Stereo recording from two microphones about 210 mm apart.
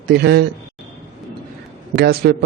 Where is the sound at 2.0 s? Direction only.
50° right (ahead or behind).